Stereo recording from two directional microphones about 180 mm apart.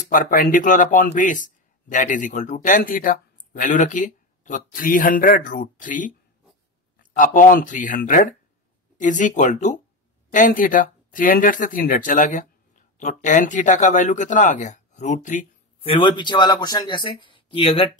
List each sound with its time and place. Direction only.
0.1 s speech: 50° left (ahead or behind)
15.8 s speech: 30° left (ahead or behind)